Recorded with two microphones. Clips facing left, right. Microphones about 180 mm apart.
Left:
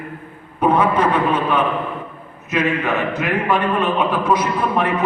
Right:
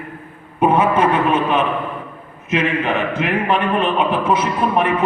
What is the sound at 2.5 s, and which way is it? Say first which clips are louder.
A man's voice: right 1 dB; 25° right (ahead or behind).